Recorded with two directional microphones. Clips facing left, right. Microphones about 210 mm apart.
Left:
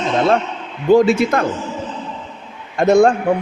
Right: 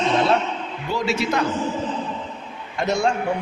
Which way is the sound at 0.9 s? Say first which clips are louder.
Left 12 dB; 50° left (ahead or behind).